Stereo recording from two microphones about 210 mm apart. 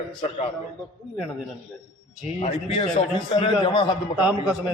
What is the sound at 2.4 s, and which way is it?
A man's voice, 25° left (ahead or behind).